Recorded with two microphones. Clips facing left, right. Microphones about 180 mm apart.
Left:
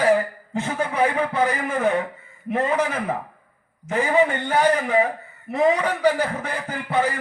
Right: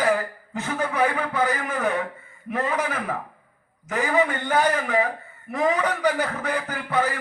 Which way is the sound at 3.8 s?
20° left (ahead or behind).